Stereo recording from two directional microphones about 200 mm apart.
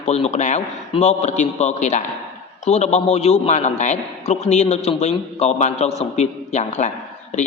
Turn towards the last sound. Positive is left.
turn(degrees=35)  # may be behind; listen again after turning